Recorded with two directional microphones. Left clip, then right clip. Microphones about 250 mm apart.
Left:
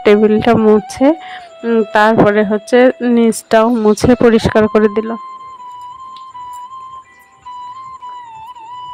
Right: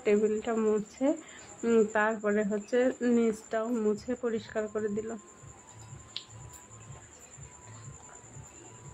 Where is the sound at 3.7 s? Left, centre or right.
Left.